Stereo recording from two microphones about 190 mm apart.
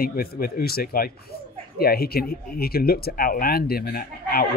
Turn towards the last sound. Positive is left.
turn(degrees=50)  # may be behind; listen again after turning